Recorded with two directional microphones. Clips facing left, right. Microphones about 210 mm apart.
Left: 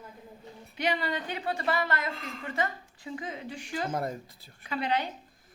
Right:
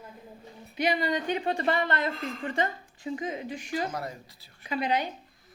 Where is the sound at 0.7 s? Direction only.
15° right (ahead or behind); by 2.7 s 30° right (ahead or behind).